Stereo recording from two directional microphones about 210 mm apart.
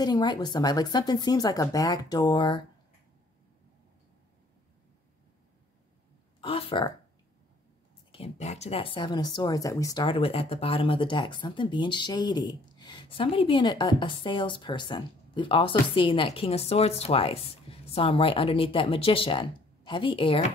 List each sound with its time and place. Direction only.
0.0 s a woman's voice: 20° left (ahead or behind)
6.4 s a woman's voice: 25° left (ahead or behind)
8.1 s a woman's voice: 30° left (ahead or behind)